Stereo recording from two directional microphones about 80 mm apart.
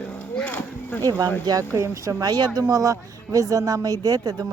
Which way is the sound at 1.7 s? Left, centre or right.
Right.